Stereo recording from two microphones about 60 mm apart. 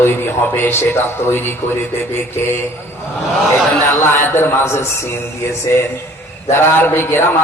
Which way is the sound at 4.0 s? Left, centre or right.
Left.